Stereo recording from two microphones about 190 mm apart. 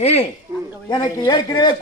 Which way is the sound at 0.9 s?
25° left (ahead or behind).